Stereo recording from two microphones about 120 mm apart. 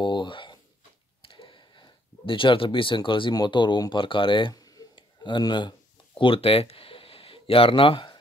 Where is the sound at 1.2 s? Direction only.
50° left (ahead or behind).